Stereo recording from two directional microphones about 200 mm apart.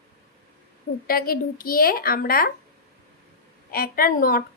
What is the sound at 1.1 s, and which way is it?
A woman's voice, 45° left (ahead or behind).